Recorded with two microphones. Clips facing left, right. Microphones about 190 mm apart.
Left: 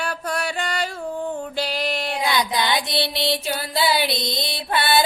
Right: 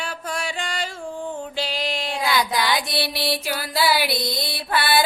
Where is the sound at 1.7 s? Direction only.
60° left (ahead or behind).